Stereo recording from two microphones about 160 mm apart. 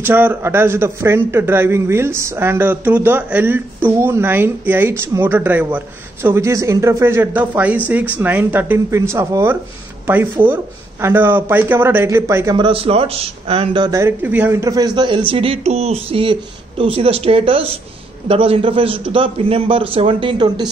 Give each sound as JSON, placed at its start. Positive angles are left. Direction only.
{"t": 0.0, "sound": "a man's voice", "side_deg": -10}
{"t": 12.5, "sound": "speech", "side_deg": -35}
{"t": 13.9, "sound": "speech", "side_deg": -15}